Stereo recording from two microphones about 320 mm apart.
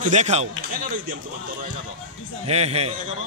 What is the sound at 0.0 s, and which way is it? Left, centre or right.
Speech, right.